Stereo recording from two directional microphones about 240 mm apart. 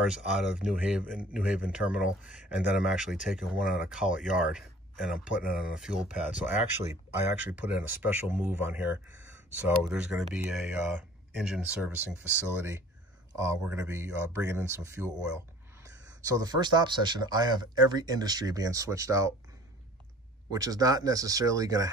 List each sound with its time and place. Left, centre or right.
0.0 s speech: centre
16.3 s speech: centre
20.4 s speech: centre